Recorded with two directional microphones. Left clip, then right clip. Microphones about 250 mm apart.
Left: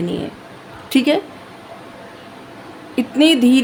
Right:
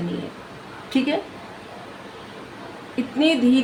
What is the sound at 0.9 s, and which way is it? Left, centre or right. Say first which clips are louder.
Speech: left 7 dB; left.